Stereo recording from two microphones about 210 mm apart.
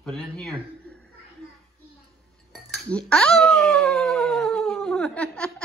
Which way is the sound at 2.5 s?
5° left (ahead or behind).